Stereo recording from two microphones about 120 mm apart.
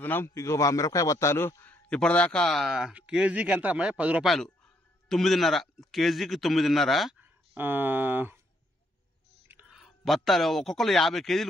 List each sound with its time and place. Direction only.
0.0 s a man's voice: 20° left (ahead or behind)
1.9 s speech: 10° left (ahead or behind); by 4.3 s 10° right (ahead or behind)
5.0 s a man's voice: centre (ahead or behind)
7.5 s speech: 15° right (ahead or behind)
9.7 s speech: centre (ahead or behind)